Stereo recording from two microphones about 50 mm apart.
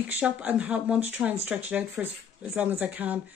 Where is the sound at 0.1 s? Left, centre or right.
Right.